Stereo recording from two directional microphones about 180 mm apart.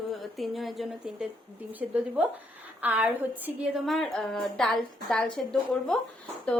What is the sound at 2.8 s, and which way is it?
A woman's voice, 10° right (ahead or behind).